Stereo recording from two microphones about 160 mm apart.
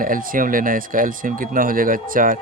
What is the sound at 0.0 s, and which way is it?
Speech, 60° right (ahead or behind).